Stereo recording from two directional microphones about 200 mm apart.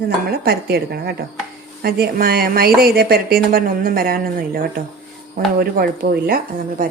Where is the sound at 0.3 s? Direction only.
50° right (ahead or behind).